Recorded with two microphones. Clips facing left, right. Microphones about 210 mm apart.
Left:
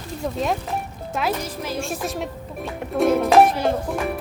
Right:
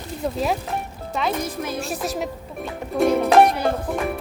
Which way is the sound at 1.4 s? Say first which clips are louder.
Right 2 dB; 55° right (ahead or behind).